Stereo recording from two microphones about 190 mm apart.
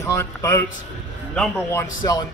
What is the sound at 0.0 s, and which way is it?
Speech, 15° left (ahead or behind).